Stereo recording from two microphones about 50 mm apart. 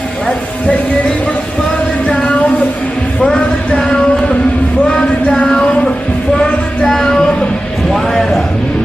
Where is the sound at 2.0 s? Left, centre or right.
Centre.